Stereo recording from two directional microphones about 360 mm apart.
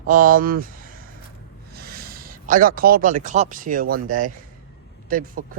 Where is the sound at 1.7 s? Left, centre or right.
Right.